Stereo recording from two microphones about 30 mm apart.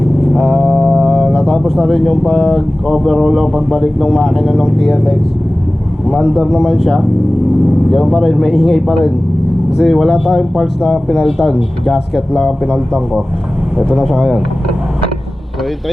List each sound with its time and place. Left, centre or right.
0.2 s vehicle: centre
0.8 s organ: right
1.0 s a sound: centre
1.6 s speech: centre
6.4 s speech: right
6.7 s speech: centre
8.1 s speech: centre
13.7 s speech: centre